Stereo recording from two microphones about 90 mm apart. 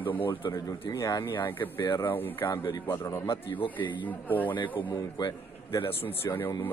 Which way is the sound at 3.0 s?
30° left (ahead or behind).